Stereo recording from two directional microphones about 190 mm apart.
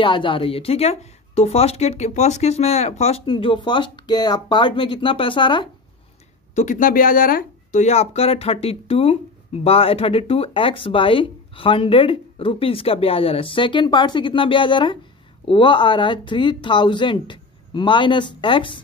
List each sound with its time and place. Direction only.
0.0 s speech: 25° left (ahead or behind)
6.5 s speech: 40° left (ahead or behind); by 18.8 s 25° left (ahead or behind)